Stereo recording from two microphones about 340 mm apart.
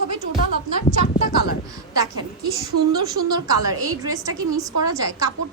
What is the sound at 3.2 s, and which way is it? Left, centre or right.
Speech, right.